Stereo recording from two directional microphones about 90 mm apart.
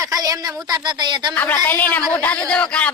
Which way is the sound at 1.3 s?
20° left (ahead or behind).